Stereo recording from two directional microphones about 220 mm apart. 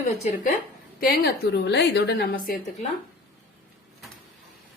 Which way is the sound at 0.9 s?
40° left (ahead or behind).